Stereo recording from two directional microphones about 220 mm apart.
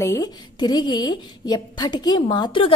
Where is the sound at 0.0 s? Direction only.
15° left (ahead or behind).